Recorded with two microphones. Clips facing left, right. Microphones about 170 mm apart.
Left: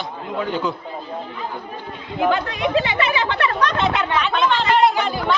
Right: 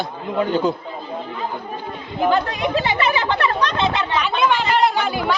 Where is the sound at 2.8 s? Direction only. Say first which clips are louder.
Right 1 dB; 40° right (ahead or behind).